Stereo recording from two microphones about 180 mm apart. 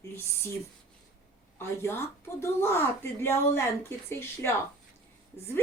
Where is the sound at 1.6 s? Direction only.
15° left (ahead or behind).